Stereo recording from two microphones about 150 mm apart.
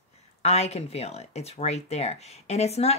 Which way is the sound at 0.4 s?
45° left (ahead or behind).